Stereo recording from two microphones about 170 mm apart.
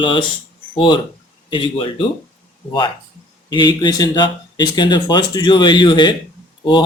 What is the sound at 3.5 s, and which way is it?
Speech, 25° left (ahead or behind).